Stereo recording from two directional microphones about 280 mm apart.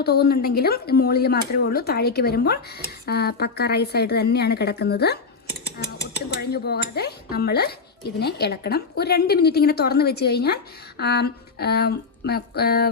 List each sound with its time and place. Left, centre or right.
0.0 s mechanisms: left